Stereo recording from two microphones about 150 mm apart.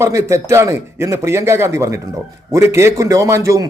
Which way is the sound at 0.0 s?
20° right (ahead or behind).